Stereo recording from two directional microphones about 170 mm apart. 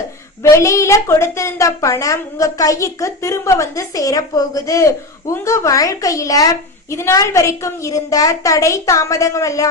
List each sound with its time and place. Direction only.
0.4 s a woman's voice: 15° left (ahead or behind)